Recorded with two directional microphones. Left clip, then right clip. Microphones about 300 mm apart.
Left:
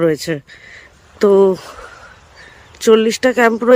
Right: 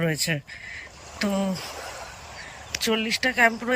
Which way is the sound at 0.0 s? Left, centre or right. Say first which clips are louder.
Left 10 dB; centre.